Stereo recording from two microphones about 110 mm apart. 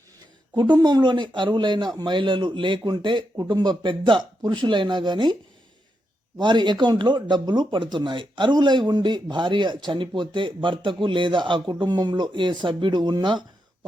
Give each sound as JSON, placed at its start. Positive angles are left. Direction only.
{"t": 0.5, "sound": "a man's voice", "side_deg": -40}
{"t": 6.4, "sound": "a man's voice", "side_deg": -45}